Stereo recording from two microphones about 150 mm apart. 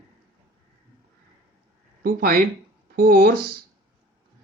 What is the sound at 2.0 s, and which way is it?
Speech, 75° right (ahead or behind).